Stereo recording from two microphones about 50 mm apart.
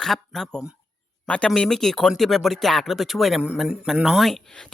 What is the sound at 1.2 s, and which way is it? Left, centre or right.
Speech, centre.